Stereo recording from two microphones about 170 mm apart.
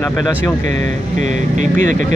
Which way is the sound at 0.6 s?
45° right (ahead or behind).